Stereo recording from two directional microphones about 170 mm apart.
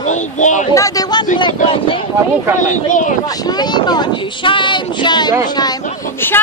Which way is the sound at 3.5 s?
25° left (ahead or behind).